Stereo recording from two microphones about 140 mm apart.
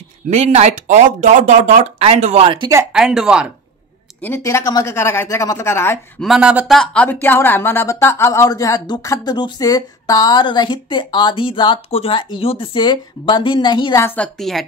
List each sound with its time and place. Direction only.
0.3 s speech: 55° right (ahead or behind)
2.4 s speech: 40° right (ahead or behind)
2.9 s speech: 5° right (ahead or behind)
4.2 s a woman's voice: 20° left (ahead or behind)
6.1 s speech: centre (ahead or behind)
6.8 s speech: 10° left (ahead or behind); by 13.9 s 35° left (ahead or behind)
13.9 s a woman's voice: 15° left (ahead or behind)